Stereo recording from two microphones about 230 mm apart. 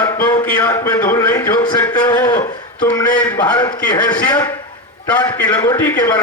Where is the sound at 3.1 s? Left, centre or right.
Centre.